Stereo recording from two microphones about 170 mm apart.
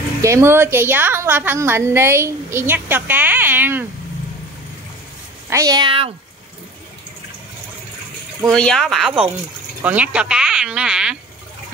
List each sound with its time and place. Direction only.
0.2 s a woman's voice: 15° right (ahead or behind)
5.5 s speech: 20° right (ahead or behind)
8.5 s speech: 5° left (ahead or behind)